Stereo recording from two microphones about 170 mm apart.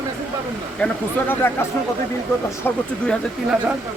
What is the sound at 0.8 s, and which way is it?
Speech, 10° left (ahead or behind).